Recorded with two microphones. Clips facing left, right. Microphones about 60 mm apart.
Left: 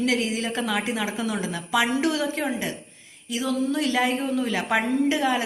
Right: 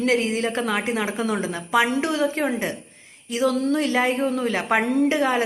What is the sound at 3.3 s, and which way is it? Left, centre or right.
A woman's voice, right.